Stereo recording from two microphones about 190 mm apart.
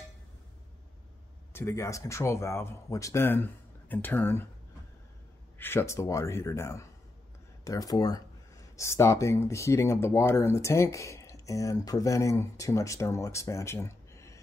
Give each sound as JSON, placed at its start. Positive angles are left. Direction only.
{"t": 1.5, "sound": "speech", "side_deg": 15}
{"t": 5.6, "sound": "speech", "side_deg": 10}